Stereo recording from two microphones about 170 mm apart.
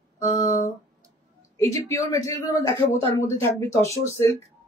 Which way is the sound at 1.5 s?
15° left (ahead or behind).